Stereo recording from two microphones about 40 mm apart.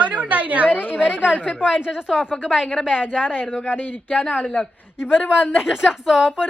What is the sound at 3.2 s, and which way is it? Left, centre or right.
Speech, left.